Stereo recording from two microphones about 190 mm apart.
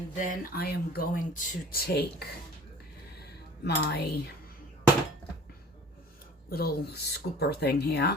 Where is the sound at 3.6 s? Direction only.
60° left (ahead or behind).